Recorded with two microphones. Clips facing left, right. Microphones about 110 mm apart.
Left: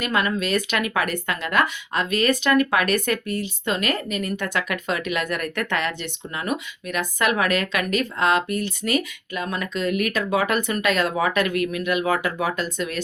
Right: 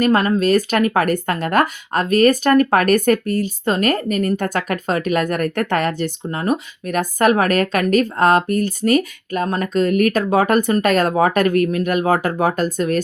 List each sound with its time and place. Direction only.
0.0 s speech: 40° right (ahead or behind)